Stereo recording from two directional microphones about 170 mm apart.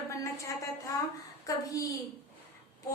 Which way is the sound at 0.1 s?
20° left (ahead or behind).